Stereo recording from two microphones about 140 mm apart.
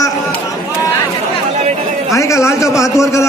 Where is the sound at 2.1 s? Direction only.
20° left (ahead or behind).